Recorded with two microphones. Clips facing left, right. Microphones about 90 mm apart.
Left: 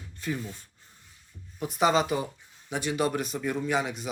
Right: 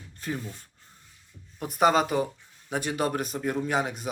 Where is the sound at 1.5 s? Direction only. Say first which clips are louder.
Right 2 dB; 50° right (ahead or behind).